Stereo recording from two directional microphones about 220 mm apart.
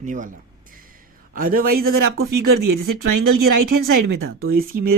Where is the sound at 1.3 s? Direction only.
40° right (ahead or behind).